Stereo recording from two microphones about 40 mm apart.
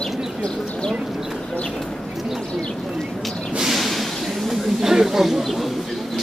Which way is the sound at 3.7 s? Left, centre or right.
Centre.